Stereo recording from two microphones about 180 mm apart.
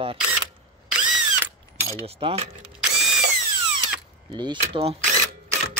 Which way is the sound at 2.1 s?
35° right (ahead or behind).